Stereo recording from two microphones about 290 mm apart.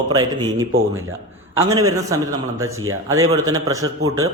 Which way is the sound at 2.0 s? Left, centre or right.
Centre.